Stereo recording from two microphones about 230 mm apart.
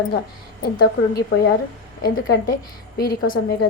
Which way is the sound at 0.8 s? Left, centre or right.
Left.